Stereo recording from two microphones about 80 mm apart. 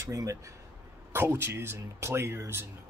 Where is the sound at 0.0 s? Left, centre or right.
Right.